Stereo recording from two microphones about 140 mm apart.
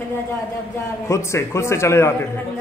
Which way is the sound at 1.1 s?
20° left (ahead or behind).